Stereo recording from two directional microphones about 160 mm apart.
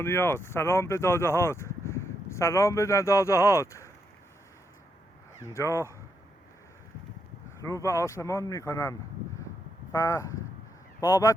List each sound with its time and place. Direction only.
0.0 s speech: 15° left (ahead or behind)
5.4 s speech: 15° left (ahead or behind)
7.6 s speech: 20° left (ahead or behind)